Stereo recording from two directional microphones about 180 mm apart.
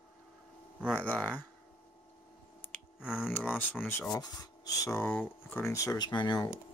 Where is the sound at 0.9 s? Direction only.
10° left (ahead or behind).